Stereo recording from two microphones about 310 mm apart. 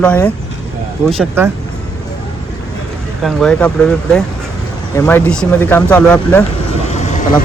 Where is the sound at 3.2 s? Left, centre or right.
Centre.